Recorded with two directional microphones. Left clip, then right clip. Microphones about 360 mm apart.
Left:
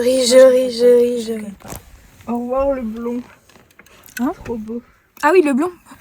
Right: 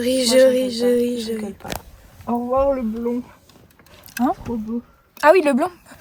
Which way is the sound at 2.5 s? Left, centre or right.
Right.